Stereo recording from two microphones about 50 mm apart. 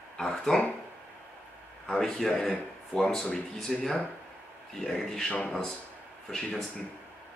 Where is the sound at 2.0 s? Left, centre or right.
Centre.